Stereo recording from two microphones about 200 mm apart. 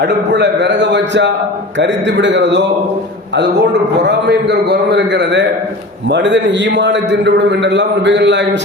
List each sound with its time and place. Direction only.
0.0 s a man's voice: 60° right (ahead or behind)